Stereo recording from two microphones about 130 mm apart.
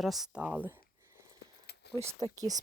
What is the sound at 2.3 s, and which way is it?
Speech, 30° right (ahead or behind).